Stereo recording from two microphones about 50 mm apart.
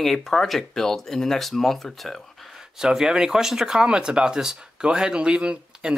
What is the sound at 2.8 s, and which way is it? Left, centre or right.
Speech, centre.